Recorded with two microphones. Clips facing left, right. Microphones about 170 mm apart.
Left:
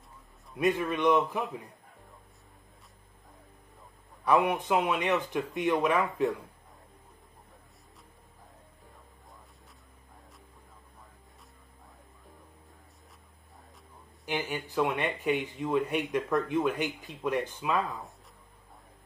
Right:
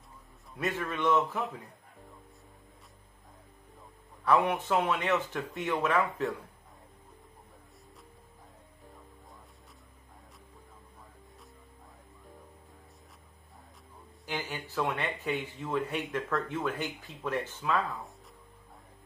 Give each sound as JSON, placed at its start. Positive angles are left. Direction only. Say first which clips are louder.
{"t": 0.6, "sound": "speech", "louder": "left 5 dB", "side_deg": 15}
{"t": 4.2, "sound": "speech", "louder": "left 1 dB", "side_deg": 15}
{"t": 14.2, "sound": "a man's voice", "louder": "left 4 dB", "side_deg": 15}